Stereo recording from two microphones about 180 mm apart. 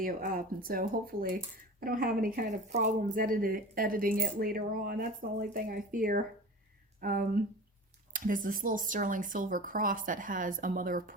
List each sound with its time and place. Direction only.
0.0 s speech: 50° right (ahead or behind)